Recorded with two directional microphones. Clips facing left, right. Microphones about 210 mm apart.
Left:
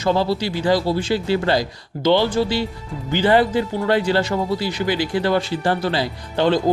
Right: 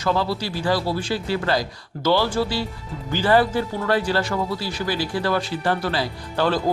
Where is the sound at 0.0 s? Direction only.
25° left (ahead or behind).